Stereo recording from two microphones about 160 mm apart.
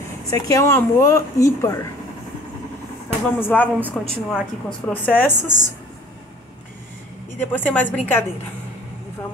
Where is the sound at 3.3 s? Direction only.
10° left (ahead or behind).